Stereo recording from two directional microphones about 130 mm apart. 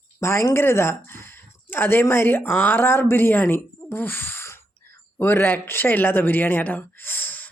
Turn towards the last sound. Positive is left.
turn(degrees=10)  # may be behind; listen again after turning